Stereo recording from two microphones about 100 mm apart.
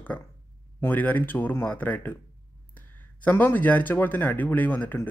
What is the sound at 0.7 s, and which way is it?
Speech, 15° left (ahead or behind).